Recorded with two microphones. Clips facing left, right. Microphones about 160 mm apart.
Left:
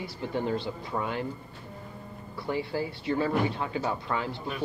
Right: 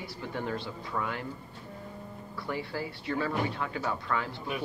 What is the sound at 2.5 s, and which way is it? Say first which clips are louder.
Speech: left 5 dB; 25° left (ahead or behind).